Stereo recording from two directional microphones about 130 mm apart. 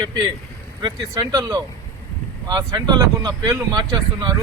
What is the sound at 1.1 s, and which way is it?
Speech, 25° right (ahead or behind).